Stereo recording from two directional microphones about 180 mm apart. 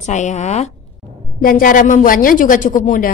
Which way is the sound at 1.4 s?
50° left (ahead or behind).